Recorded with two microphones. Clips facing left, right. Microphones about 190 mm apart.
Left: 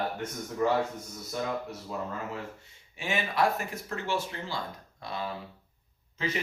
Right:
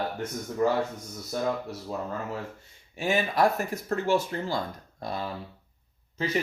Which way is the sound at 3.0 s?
40° right (ahead or behind).